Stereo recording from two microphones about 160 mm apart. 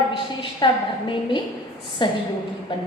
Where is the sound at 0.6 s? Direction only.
30° left (ahead or behind).